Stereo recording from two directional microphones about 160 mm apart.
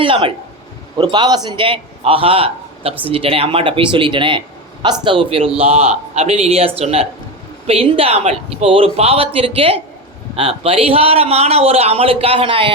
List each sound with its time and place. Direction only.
0.0 s a man's voice: 30° right (ahead or behind)